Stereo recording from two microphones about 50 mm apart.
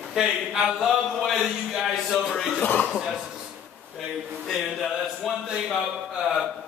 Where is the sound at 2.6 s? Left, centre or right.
Left.